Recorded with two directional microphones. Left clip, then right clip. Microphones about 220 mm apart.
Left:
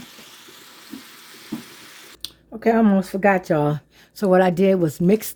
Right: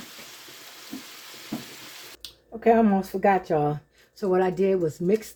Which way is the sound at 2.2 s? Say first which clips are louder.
Even; 45° left (ahead or behind).